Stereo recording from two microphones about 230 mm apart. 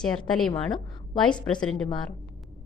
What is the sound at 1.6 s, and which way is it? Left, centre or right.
Speech, centre.